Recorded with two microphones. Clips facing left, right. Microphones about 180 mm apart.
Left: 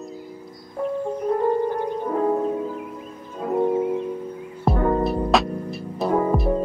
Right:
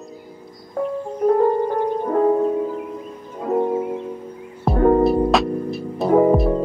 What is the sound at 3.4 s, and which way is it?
Music, 25° right (ahead or behind).